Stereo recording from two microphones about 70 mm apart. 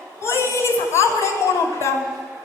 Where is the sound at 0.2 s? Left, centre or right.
Left.